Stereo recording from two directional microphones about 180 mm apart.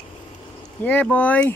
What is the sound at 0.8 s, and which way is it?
Speech, 5° left (ahead or behind).